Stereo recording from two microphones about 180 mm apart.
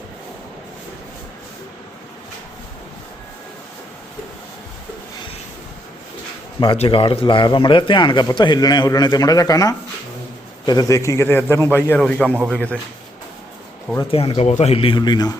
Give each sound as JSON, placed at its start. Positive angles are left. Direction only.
{"t": 6.6, "sound": "a man's voice", "side_deg": 30}
{"t": 14.1, "sound": "speech", "side_deg": 30}